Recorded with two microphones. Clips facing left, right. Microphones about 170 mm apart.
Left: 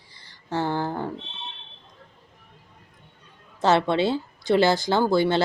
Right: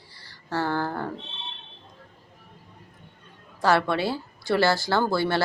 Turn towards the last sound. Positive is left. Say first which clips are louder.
# left 3 dB
turn(degrees=20)  # may be behind; listen again after turning